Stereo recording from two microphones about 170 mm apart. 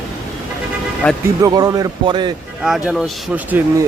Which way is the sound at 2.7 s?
5° right (ahead or behind).